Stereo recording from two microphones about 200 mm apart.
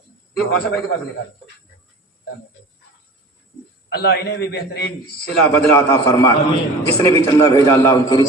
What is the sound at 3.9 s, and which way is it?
A man's voice, 55° left (ahead or behind).